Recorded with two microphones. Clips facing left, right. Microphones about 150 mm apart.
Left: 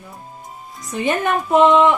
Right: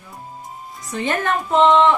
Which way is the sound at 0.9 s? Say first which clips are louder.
Left 2 dB; 15° left (ahead or behind).